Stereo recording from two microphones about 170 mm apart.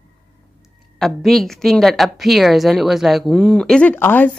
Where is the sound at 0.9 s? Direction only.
Centre (ahead or behind).